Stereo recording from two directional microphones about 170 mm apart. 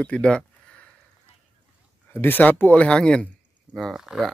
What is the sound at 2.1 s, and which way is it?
Speech, 10° left (ahead or behind).